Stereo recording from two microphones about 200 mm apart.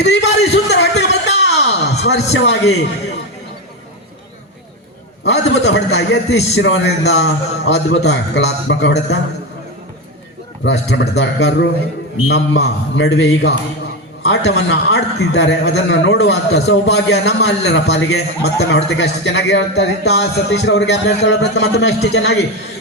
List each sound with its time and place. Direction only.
0.0 s a man's voice: 60° left (ahead or behind)
0.5 s a sound: 60° left (ahead or behind)
2.3 s a man's voice: 60° left (ahead or behind)
5.2 s a man's voice: 60° left (ahead or behind)
10.6 s a man's voice: 60° left (ahead or behind)